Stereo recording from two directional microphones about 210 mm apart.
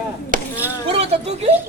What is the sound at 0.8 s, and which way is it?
Speech, 30° right (ahead or behind).